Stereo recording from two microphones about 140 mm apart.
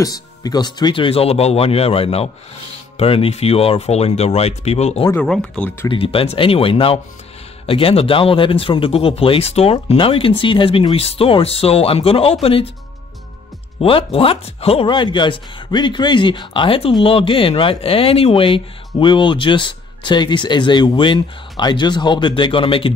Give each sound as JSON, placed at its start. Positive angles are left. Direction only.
{"t": 0.0, "sound": "speech", "side_deg": 25}
{"t": 5.1, "sound": "speech", "side_deg": 5}
{"t": 5.9, "sound": "speech", "side_deg": 40}
{"t": 13.7, "sound": "speech", "side_deg": 40}